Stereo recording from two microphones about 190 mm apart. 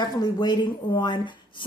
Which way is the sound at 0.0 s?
20° left (ahead or behind).